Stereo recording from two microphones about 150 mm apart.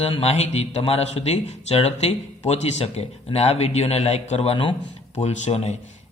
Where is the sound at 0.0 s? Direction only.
45° left (ahead or behind).